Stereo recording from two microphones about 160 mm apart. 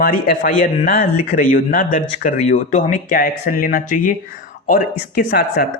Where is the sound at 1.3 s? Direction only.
65° left (ahead or behind).